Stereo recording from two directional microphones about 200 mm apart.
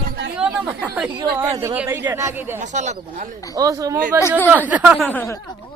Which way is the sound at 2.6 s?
35° right (ahead or behind).